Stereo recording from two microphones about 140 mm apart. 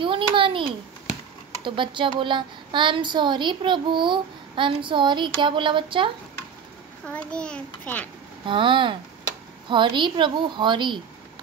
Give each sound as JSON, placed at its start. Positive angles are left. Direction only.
{"t": 0.0, "sound": "a child's voice", "side_deg": -40}
{"t": 7.1, "sound": "a child's voice", "side_deg": 10}
{"t": 8.5, "sound": "a woman's voice", "side_deg": -35}